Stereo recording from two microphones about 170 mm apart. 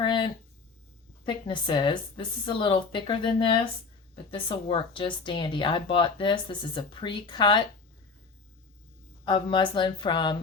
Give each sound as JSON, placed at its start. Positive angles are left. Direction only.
{"t": 0.0, "sound": "a sound", "side_deg": 30}
{"t": 1.2, "sound": "speech", "side_deg": 30}
{"t": 9.2, "sound": "speech", "side_deg": 25}